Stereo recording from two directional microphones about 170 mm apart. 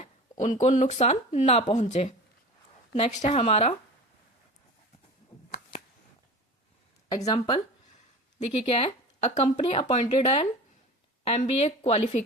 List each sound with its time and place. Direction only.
0.0 s a sound: 45° left (ahead or behind)
0.5 s speech: 45° left (ahead or behind)
7.3 s speech: 25° left (ahead or behind)
8.6 s speech: 35° left (ahead or behind)